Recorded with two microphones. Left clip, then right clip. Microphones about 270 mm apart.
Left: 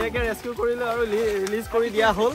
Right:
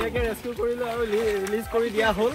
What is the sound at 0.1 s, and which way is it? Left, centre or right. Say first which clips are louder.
Speech: left 1 dB; centre.